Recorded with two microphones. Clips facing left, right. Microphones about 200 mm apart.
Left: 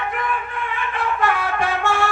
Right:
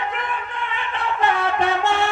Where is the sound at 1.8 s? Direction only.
20° right (ahead or behind).